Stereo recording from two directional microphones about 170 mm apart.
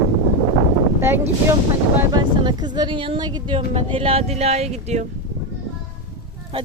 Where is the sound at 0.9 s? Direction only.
15° right (ahead or behind).